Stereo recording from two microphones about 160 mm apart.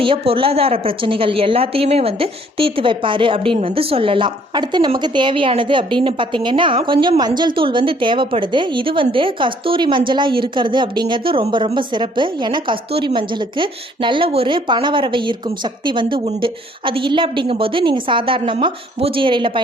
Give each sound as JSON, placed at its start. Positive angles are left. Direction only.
{"t": 0.0, "sound": "a woman's voice", "side_deg": -35}